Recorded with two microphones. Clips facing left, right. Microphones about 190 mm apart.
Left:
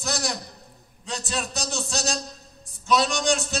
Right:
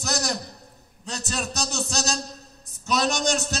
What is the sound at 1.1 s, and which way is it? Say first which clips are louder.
A man's voice: even; 40° right (ahead or behind).